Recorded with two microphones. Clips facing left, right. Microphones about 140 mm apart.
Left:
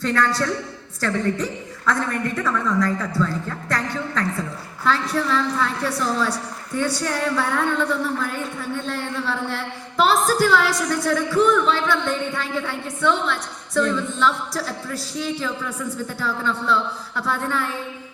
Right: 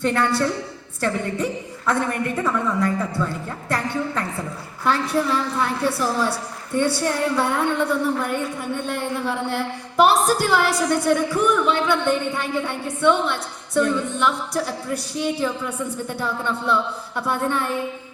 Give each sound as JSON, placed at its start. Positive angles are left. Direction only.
{"t": 0.0, "sound": "speech", "side_deg": -25}
{"t": 1.9, "sound": "speech", "side_deg": -25}
{"t": 16.0, "sound": "speech", "side_deg": -20}